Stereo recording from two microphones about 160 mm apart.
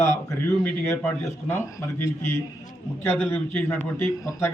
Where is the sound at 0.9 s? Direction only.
15° left (ahead or behind).